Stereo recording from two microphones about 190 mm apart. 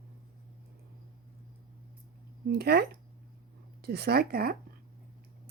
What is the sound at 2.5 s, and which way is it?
A woman's voice, 55° right (ahead or behind).